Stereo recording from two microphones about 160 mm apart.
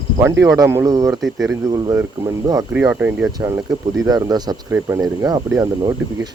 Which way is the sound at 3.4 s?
20° right (ahead or behind).